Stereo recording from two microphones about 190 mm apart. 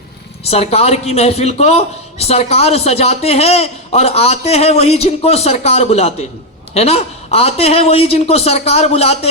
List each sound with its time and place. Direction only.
0.4 s a man's voice: 30° left (ahead or behind)